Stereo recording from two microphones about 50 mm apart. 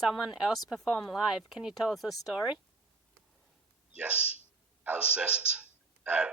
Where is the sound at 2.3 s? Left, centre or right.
Centre.